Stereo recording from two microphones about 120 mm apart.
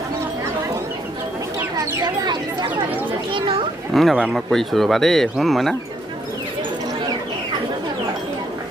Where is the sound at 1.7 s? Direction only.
30° right (ahead or behind).